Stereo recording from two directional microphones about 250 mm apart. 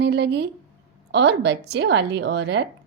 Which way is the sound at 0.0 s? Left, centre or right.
Right.